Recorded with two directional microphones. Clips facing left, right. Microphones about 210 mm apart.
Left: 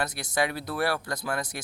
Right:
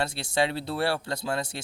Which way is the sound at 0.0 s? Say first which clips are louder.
Right 2 dB; 25° right (ahead or behind).